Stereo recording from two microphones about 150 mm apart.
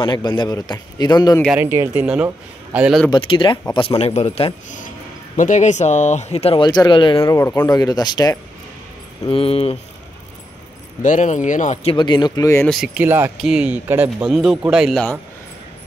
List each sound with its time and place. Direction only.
0.0 s speech: 30° left (ahead or behind)
1.6 s a man's voice: 15° right (ahead or behind)
3.1 s speech: 35° left (ahead or behind)
4.0 s speech: 45° left (ahead or behind)
7.3 s speech: 20° left (ahead or behind)
9.3 s speech: 40° left (ahead or behind)
11.0 s speech: 55° left (ahead or behind)
11.9 s speech: 30° left (ahead or behind)
12.6 s speech: centre (ahead or behind)
14.2 s speech: centre (ahead or behind)